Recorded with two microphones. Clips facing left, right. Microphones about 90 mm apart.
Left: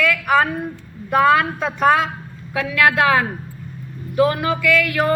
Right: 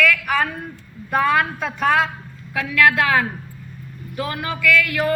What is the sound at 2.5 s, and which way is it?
Speech, 20° left (ahead or behind).